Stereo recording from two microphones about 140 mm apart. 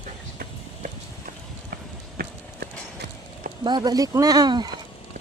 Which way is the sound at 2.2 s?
90° right.